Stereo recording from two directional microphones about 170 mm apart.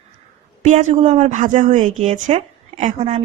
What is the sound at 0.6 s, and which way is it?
Speech, 45° right (ahead or behind).